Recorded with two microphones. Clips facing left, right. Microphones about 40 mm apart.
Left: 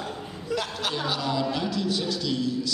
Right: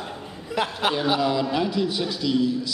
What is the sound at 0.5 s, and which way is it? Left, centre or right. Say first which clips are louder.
A man's voice: right 5 dB; right.